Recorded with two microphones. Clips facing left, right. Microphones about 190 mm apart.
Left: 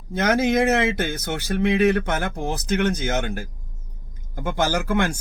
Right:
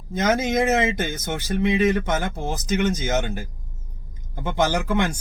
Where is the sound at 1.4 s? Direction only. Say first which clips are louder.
Left 1 dB; 10° left (ahead or behind).